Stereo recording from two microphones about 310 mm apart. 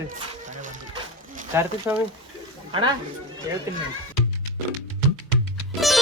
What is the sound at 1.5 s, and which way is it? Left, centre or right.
Speech, centre.